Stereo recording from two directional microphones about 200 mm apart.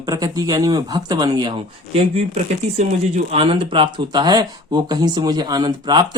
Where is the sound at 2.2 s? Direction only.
35° right (ahead or behind).